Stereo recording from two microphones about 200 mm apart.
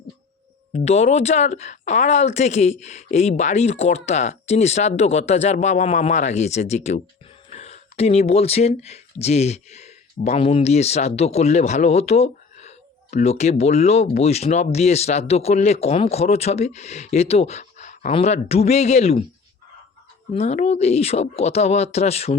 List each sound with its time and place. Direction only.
0.7 s speech: 35° left (ahead or behind)
20.3 s speech: 35° left (ahead or behind)